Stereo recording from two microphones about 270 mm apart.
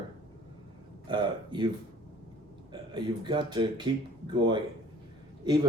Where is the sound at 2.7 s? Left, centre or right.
Centre.